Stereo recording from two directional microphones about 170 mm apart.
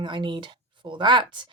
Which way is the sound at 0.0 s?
25° right (ahead or behind).